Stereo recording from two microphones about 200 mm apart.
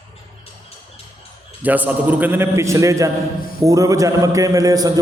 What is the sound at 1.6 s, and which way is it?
A man's voice, 10° right (ahead or behind).